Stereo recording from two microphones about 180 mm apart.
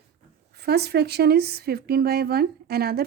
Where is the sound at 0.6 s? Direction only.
65° right (ahead or behind).